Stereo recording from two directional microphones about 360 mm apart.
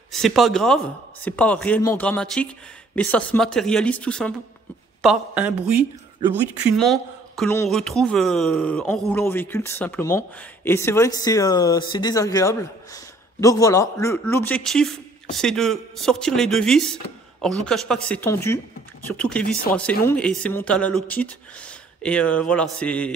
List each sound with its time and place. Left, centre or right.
0.1 s a man's voice: centre
19.4 s speech: left
19.7 s a man's voice: centre